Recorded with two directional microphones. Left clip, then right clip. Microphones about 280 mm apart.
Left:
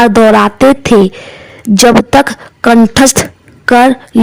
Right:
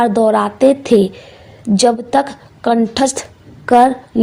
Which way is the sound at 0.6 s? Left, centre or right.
Left.